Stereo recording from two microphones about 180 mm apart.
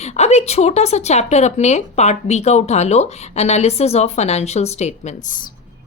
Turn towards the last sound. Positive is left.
turn(degrees=45)  # may be behind; listen again after turning